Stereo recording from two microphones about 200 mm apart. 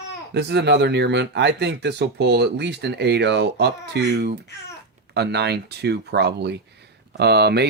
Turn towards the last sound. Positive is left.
turn(degrees=-55)  # may be behind; listen again after turning